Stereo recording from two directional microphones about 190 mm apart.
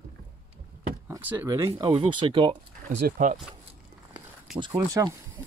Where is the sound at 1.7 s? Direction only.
25° right (ahead or behind).